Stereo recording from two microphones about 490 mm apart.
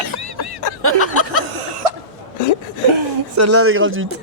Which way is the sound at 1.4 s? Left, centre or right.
Right.